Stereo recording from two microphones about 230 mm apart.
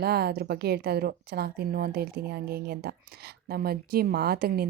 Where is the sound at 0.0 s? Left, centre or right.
Right.